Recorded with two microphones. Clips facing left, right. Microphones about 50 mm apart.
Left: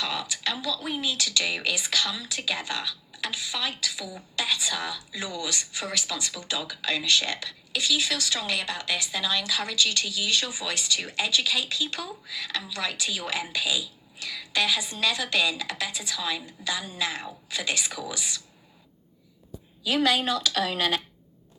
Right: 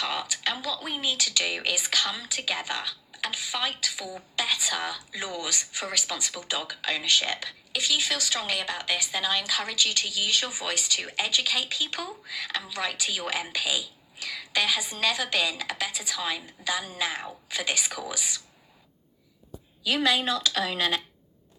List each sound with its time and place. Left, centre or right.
0.0 s a woman's voice: right